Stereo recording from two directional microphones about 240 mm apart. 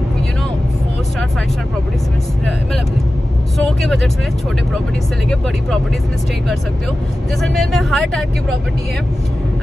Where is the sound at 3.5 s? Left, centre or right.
Centre.